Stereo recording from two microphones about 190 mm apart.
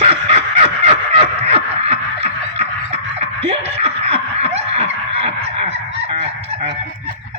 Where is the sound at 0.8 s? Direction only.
30° right (ahead or behind).